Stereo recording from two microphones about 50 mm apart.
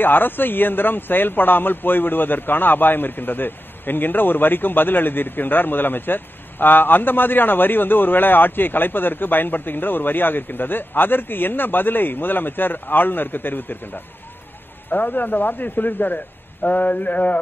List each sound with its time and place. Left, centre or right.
0.0 s a man's voice: left